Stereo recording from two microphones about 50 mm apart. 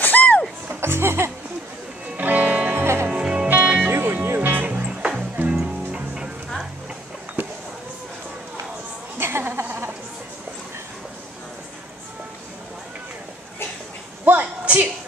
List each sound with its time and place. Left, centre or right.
0.0 s music: left
0.7 s speech: right
2.1 s music: right
2.7 s music: right
3.1 s music: centre
3.4 s music: right
3.9 s music: right
5.5 s music: centre
7.4 s a sound: right
9.2 s a sound: right
14.2 s a sound: right